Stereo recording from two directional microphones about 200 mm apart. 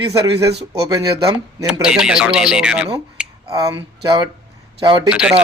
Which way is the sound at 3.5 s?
15° right (ahead or behind).